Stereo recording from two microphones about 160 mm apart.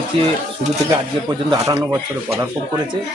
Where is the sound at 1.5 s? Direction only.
20° right (ahead or behind).